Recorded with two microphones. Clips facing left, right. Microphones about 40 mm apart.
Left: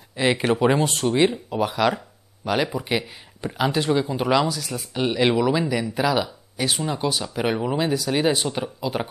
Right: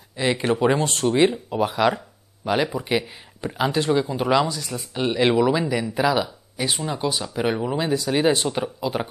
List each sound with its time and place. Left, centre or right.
0.1 s speech: centre
4.5 s speech: centre
4.7 s speech: centre
6.8 s speech: centre